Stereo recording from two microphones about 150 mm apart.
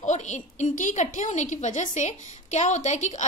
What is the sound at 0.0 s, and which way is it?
A woman's voice, 50° left (ahead or behind).